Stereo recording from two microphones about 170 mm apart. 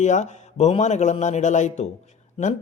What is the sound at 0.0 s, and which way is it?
Speech, 45° left (ahead or behind).